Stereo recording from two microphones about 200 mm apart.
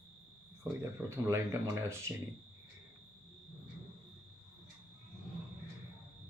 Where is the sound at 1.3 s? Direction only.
15° right (ahead or behind).